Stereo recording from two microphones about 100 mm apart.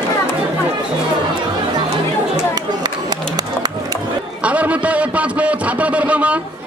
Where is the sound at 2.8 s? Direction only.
40° right (ahead or behind).